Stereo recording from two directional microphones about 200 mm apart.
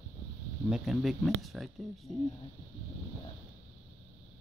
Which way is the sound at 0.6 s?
Centre (ahead or behind).